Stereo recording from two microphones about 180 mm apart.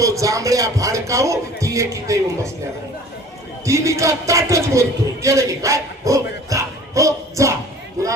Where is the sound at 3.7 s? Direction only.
15° right (ahead or behind).